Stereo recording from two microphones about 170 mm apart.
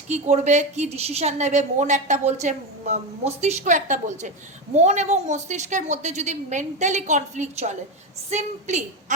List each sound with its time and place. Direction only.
0.1 s a woman's voice: 45° right (ahead or behind)